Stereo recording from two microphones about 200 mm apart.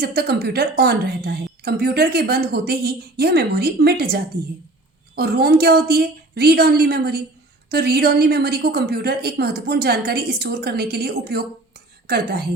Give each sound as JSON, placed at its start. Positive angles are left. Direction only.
{"t": 0.0, "sound": "a woman's voice", "side_deg": -55}